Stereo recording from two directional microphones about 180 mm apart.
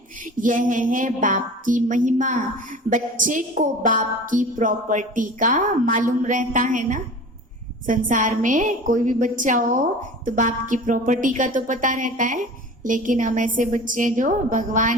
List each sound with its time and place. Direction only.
0.3 s a woman's voice: 45° right (ahead or behind)